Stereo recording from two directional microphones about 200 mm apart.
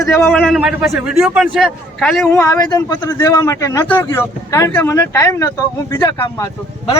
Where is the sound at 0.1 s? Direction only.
10° left (ahead or behind).